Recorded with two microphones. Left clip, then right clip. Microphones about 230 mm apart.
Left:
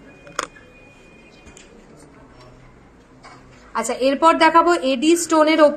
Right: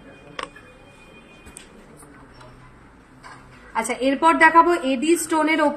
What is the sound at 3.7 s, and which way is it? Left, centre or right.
A woman's voice, left.